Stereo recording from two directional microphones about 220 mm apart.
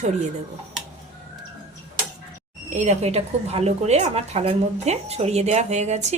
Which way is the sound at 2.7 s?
30° right (ahead or behind).